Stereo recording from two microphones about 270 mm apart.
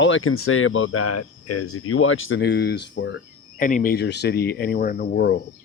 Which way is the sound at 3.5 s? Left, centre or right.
Left.